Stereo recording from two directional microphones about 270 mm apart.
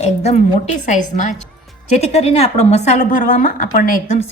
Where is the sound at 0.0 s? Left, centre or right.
Left.